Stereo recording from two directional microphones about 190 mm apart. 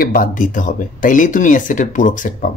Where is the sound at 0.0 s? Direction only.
45° left (ahead or behind).